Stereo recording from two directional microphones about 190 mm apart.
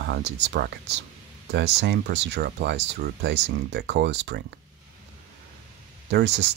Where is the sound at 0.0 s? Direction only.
60° right (ahead or behind).